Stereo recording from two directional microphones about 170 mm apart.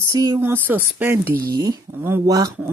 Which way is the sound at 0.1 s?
20° right (ahead or behind).